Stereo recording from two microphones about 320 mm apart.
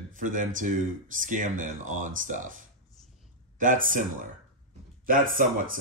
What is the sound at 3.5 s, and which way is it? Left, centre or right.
Speech, right.